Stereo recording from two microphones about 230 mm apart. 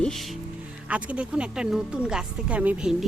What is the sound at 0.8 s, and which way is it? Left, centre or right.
Speech, centre.